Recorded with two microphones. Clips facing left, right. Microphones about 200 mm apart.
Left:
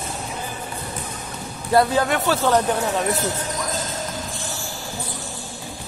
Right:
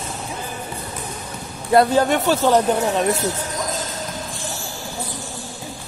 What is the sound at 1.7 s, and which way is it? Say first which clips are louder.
Speech: right 3 dB; 20° right (ahead or behind).